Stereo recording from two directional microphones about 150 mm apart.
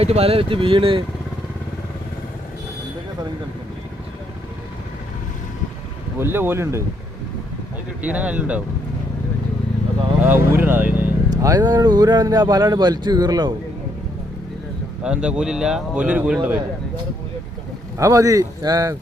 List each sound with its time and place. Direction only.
0.0 s speech: 40° right (ahead or behind)
6.1 s speech: 15° right (ahead or behind)
8.0 s speech: 10° right (ahead or behind)
10.2 s speech: 15° right (ahead or behind)
11.3 s speech: 25° right (ahead or behind)
15.0 s speech: 5° right (ahead or behind)
17.9 s speech: 20° right (ahead or behind)